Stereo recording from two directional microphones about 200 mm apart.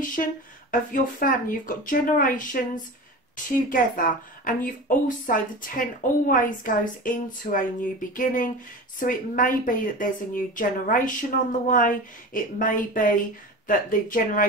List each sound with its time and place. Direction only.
0.1 s a woman's voice: 40° left (ahead or behind)